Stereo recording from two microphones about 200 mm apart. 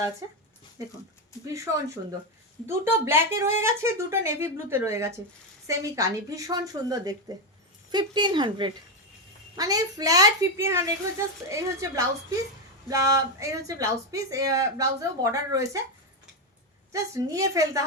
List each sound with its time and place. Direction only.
0.2 s speech: 15° right (ahead or behind)
1.5 s speech: 15° right (ahead or behind)
16.9 s speech: 15° right (ahead or behind)